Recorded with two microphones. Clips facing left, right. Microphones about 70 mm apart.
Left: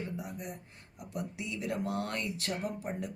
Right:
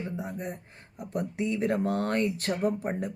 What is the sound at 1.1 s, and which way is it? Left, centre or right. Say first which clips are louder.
Speech: right 9 dB; right.